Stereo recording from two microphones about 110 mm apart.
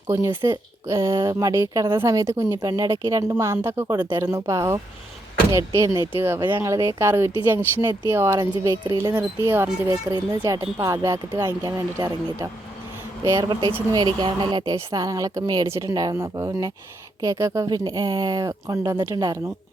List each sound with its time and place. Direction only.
0.4 s speech: 30° right (ahead or behind)
9.1 s speech: 20° right (ahead or behind)